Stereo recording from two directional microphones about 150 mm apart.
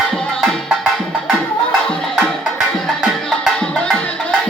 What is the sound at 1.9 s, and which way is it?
Music, 5° left (ahead or behind).